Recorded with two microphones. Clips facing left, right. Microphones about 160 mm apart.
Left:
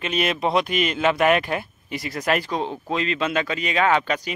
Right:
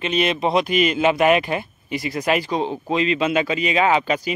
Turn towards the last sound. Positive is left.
turn(degrees=-5)  # may be behind; listen again after turning